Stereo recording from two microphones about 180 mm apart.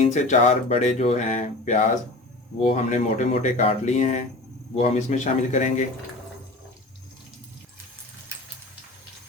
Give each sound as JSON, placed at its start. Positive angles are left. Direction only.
{"t": 0.0, "sound": "speech", "side_deg": 40}